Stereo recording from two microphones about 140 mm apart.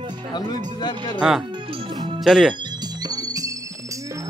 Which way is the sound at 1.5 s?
35° right (ahead or behind).